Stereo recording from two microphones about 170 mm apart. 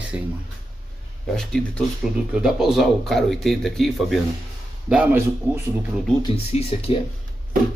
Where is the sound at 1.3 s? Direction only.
5° left (ahead or behind).